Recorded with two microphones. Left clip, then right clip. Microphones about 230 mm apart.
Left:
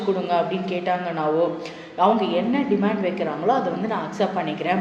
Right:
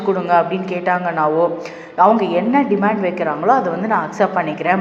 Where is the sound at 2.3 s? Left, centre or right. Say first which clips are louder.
Right 6 dB; centre.